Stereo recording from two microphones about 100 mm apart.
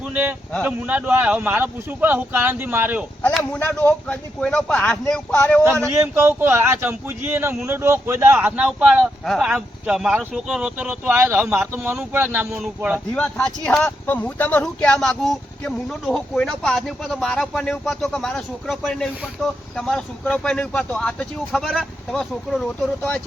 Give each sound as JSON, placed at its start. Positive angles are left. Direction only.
{"t": 0.1, "sound": "speech", "side_deg": -20}
{"t": 3.3, "sound": "speech", "side_deg": 10}
{"t": 5.8, "sound": "speech", "side_deg": -30}
{"t": 9.0, "sound": "speech", "side_deg": 5}
{"t": 9.4, "sound": "speech", "side_deg": -10}
{"t": 12.5, "sound": "speech", "side_deg": -10}
{"t": 13.1, "sound": "speech", "side_deg": 15}